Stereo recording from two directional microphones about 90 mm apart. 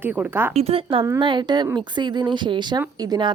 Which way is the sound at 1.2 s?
65° right (ahead or behind).